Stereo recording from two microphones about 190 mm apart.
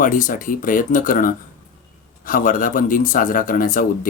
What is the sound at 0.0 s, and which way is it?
Speech, 45° left (ahead or behind).